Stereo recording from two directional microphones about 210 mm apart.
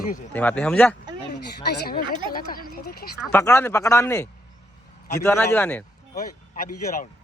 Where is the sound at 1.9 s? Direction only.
45° left (ahead or behind).